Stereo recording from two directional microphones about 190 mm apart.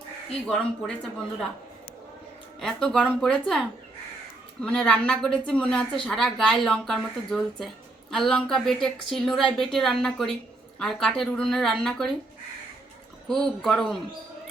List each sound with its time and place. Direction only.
0.4 s a woman's voice: 5° left (ahead or behind)
2.6 s a woman's voice: 5° left (ahead or behind)
13.2 s a woman's voice: centre (ahead or behind)